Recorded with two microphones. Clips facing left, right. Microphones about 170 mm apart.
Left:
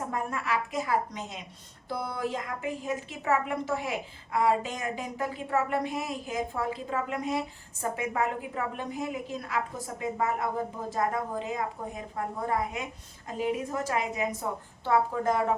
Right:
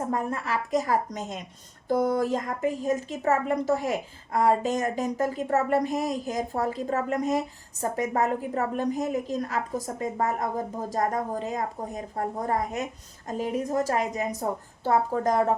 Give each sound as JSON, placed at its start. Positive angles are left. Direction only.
{"t": 0.1, "sound": "a woman's voice", "side_deg": -35}